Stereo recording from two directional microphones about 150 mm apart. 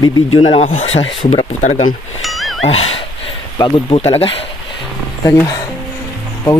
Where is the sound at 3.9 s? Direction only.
40° left (ahead or behind).